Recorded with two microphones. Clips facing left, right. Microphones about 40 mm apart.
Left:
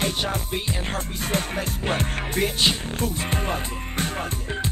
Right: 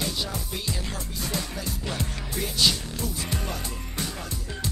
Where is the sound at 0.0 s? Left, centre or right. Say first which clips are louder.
Left 5 dB; left.